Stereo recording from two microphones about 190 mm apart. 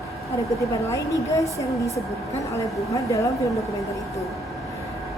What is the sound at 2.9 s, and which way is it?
Speech, 15° left (ahead or behind).